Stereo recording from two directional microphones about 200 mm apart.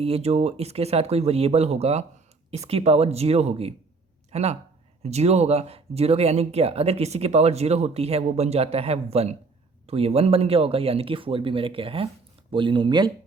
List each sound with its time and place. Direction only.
0.0 s speech: 30° right (ahead or behind)